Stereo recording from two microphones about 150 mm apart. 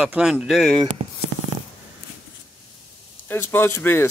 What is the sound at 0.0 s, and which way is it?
Speech, 5° right (ahead or behind).